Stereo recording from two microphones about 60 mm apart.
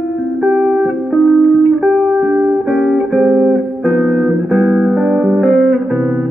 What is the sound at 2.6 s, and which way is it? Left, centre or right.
Music, centre.